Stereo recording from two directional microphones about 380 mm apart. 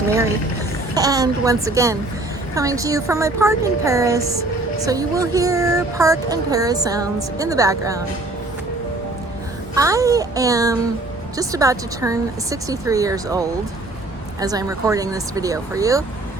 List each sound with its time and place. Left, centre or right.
0.9 s speech: centre
9.7 s speech: centre